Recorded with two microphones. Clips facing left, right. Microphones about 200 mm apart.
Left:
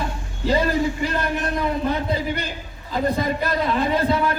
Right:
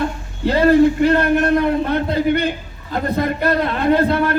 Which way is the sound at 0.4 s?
60° right (ahead or behind).